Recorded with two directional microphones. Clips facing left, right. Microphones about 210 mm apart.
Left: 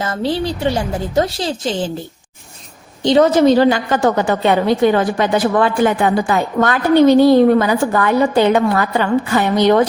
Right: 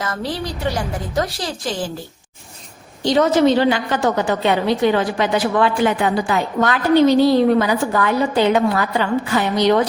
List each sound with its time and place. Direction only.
0.0 s a woman's voice: 25° left (ahead or behind)
3.0 s a woman's voice: 25° left (ahead or behind)
3.4 s a woman's voice: 40° left (ahead or behind)